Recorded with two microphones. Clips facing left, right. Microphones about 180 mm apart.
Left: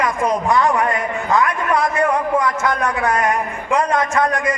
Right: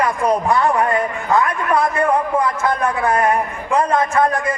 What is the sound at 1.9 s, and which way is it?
A man's voice, 30° right (ahead or behind).